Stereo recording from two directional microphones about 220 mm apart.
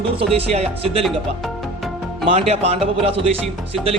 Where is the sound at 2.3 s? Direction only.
30° right (ahead or behind).